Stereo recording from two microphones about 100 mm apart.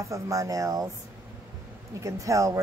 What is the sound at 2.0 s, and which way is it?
Speech, 30° right (ahead or behind).